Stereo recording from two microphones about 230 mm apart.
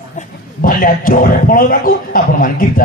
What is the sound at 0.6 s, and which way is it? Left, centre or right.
Speech, left.